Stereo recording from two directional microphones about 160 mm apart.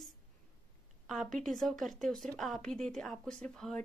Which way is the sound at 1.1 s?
Centre (ahead or behind).